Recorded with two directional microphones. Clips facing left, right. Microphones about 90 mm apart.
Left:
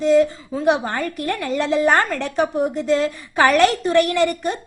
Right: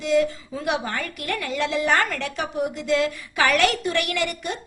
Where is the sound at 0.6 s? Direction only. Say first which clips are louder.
Left 7 dB; 35° left (ahead or behind).